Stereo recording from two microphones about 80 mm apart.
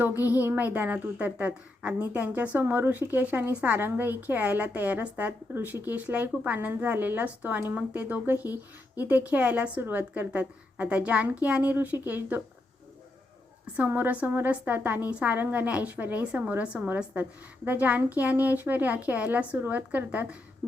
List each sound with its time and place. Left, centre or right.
0.0 s a woman's voice: right
13.7 s a woman's voice: right